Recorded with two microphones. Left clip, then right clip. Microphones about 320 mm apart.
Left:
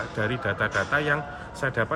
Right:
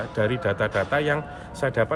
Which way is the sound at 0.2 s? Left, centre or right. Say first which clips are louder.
Right 3 dB; right.